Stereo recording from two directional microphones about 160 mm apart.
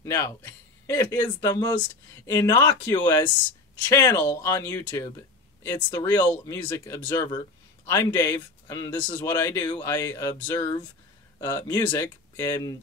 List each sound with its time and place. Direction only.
0.0 s speech: 20° left (ahead or behind)